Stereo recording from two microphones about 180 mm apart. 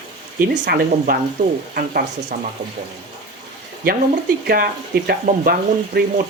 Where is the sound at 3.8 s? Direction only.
55° right (ahead or behind).